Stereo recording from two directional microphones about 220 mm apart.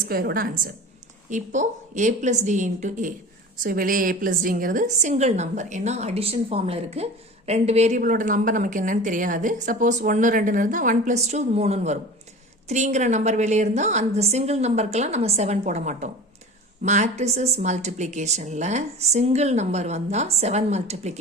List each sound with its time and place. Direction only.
0.0 s a woman's voice: 45° right (ahead or behind)